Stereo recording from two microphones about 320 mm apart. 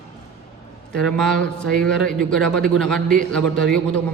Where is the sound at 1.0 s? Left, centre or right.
Centre.